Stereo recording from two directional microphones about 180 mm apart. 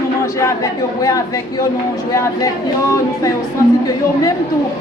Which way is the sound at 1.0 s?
20° left (ahead or behind).